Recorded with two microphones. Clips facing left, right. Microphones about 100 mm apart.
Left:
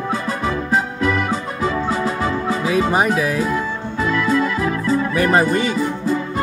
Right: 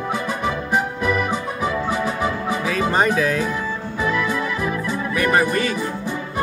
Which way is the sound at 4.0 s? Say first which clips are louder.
Left 4 dB; 15° right (ahead or behind).